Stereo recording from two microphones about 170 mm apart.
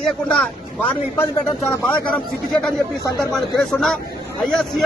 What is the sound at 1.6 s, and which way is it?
A man's voice, 5° left (ahead or behind).